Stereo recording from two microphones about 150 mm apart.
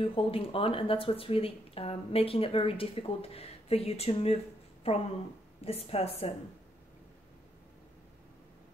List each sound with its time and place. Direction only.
0.0 s a woman's voice: 35° left (ahead or behind)